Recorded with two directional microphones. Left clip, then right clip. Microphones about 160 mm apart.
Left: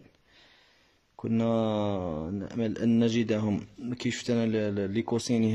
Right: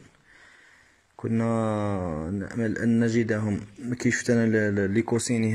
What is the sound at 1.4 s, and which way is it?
Speech, 15° left (ahead or behind).